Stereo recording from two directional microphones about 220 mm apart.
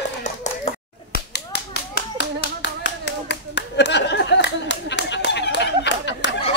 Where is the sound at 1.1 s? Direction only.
50° left (ahead or behind).